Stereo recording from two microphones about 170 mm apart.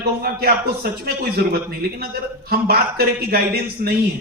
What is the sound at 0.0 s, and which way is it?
A man's voice, 65° right (ahead or behind).